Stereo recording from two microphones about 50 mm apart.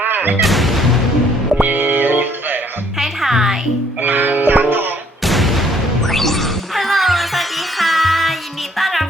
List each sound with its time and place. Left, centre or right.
0.0 s music: right
0.3 s music: centre
1.6 s music: right
3.0 s music: centre
4.0 s music: right
5.2 s a sound: centre
6.1 s music: centre